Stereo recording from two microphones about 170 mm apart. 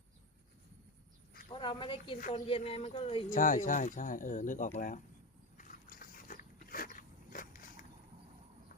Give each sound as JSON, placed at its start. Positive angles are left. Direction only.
{"t": 1.5, "sound": "speech", "side_deg": 30}
{"t": 3.2, "sound": "speech", "side_deg": 50}
{"t": 5.5, "sound": "biting", "side_deg": 55}